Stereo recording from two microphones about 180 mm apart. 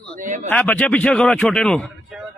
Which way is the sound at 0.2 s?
45° right (ahead or behind).